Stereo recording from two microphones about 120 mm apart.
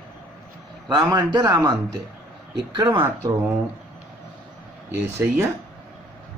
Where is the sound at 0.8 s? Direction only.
35° right (ahead or behind).